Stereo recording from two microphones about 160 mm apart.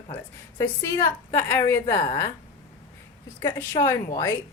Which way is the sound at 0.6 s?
15° left (ahead or behind).